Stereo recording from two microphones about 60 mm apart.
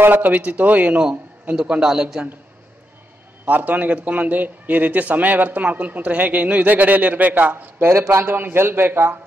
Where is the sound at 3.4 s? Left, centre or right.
Right.